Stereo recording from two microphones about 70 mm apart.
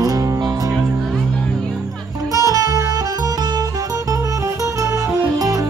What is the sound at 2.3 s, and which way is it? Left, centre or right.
Music, right.